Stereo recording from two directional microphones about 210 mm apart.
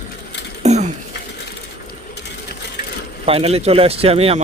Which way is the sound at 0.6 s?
35° right (ahead or behind).